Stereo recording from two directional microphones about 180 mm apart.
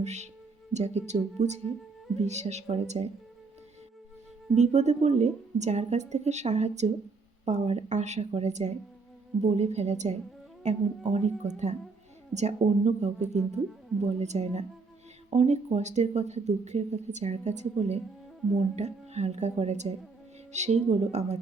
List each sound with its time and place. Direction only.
0.0 s speech: 40° right (ahead or behind)
4.5 s speech: 40° right (ahead or behind)